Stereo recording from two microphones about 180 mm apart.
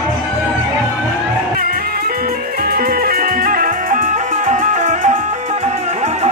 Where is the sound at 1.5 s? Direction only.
55° right (ahead or behind).